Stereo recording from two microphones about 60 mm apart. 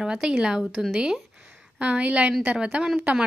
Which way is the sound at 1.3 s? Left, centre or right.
Centre.